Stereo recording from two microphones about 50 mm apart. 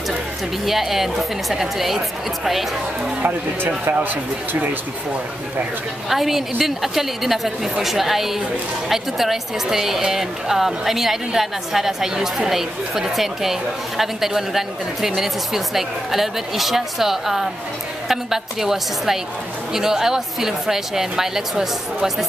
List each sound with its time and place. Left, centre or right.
0.7 s a woman's voice: centre
3.9 s speech: right
6.0 s a woman's voice: centre